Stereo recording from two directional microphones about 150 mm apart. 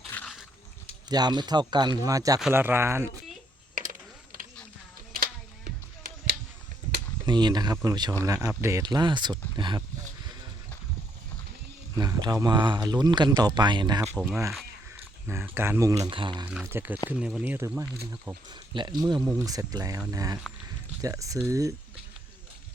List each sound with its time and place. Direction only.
0.1 s a sound: 10° left (ahead or behind)
1.1 s speech: 30° right (ahead or behind)
3.8 s typing: 65° right (ahead or behind)
5.1 s a sound: 90° right
7.3 s speech: 30° right (ahead or behind)
11.9 s speech: 25° right (ahead or behind)
15.3 s speech: 15° right (ahead or behind); by 16.5 s 30° right (ahead or behind)
16.5 s speech: 15° right (ahead or behind)
18.1 s speech: 30° right (ahead or behind)